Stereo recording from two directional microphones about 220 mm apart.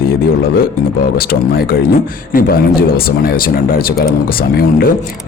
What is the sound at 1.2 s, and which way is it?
Speech, 45° left (ahead or behind).